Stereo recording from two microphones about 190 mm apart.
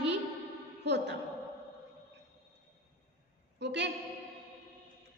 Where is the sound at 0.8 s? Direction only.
65° right (ahead or behind).